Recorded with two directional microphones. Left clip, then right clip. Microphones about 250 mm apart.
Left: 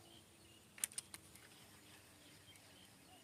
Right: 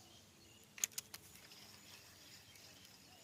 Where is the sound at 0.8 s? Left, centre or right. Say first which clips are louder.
Right 5 dB; right.